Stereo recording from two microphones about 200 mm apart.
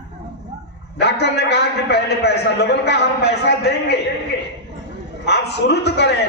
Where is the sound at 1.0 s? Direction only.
55° left (ahead or behind).